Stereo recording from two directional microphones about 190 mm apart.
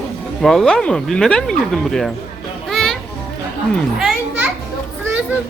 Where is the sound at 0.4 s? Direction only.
Centre (ahead or behind).